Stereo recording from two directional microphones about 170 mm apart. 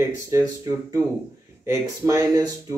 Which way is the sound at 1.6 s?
15° right (ahead or behind).